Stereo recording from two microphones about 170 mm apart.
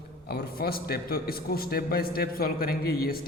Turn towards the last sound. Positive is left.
turn(degrees=65)  # may be behind; listen again after turning